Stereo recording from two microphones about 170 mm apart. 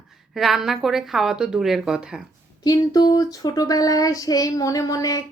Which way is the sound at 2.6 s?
25° left (ahead or behind).